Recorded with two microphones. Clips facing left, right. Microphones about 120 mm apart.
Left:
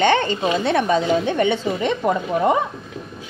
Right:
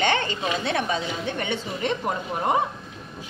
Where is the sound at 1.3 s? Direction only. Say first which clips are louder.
Left 9 dB; 80° left.